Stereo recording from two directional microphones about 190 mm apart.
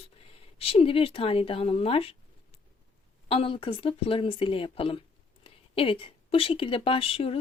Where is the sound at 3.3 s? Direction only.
30° left (ahead or behind).